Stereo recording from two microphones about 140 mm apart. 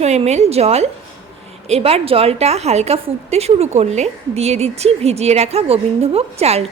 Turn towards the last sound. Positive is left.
turn(degrees=-45)  # may be behind; listen again after turning